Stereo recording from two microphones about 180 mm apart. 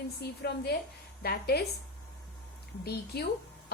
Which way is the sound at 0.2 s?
65° left (ahead or behind).